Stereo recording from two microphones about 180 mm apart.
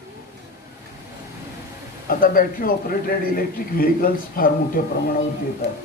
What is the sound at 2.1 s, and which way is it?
A man's voice, 50° left (ahead or behind).